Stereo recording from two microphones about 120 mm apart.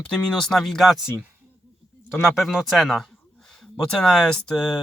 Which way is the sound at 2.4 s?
Centre (ahead or behind).